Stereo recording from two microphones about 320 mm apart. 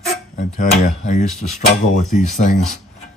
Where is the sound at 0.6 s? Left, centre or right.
Left.